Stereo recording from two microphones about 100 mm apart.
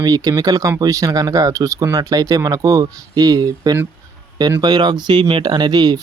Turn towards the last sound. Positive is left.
turn(degrees=-40)  # may be behind; listen again after turning